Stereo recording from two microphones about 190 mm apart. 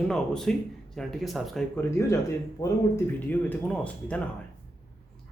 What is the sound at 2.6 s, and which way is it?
Speech, 10° left (ahead or behind).